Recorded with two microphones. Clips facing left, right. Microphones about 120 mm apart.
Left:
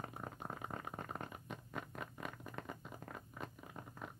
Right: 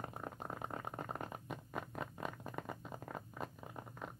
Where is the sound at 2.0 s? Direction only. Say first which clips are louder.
Right 3 dB; 30° right (ahead or behind).